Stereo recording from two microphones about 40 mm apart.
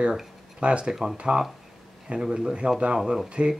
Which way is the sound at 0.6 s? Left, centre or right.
Right.